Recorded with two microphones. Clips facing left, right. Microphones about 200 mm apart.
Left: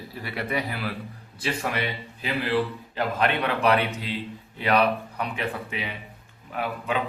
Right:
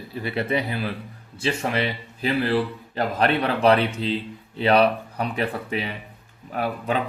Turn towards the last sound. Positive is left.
turn(degrees=-40)  # may be behind; listen again after turning